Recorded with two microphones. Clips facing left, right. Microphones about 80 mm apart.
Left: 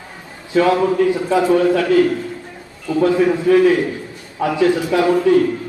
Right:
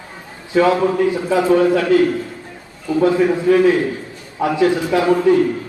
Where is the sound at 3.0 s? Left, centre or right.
Right.